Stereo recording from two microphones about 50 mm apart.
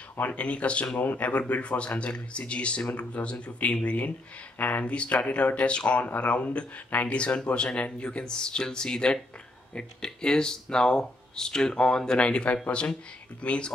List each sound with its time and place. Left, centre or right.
0.2 s speech: left